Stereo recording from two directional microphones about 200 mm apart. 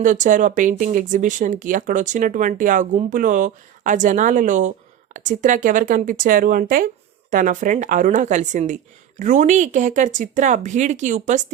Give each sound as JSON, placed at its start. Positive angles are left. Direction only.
{"t": 0.0, "sound": "speech", "side_deg": -40}